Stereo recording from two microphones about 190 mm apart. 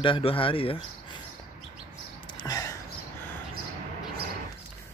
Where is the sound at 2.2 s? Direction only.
20° left (ahead or behind).